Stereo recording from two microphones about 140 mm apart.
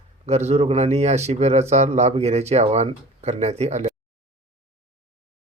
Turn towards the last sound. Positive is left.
turn(degrees=-55)  # may be behind; listen again after turning